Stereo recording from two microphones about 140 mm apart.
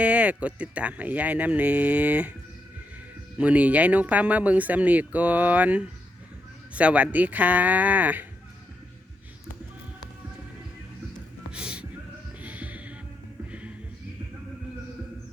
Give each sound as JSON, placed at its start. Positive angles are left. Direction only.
{"t": 0.0, "sound": "speech", "side_deg": -10}
{"t": 3.3, "sound": "speech", "side_deg": -10}
{"t": 11.5, "sound": "music", "side_deg": -10}